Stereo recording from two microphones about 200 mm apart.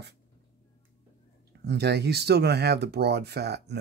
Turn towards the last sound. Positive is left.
turn(degrees=-55)  # may be behind; listen again after turning